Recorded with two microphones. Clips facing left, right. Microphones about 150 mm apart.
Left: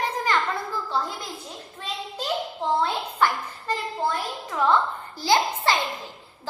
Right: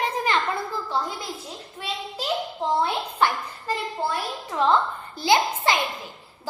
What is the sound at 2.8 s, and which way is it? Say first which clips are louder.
Speech: even; 20° right (ahead or behind).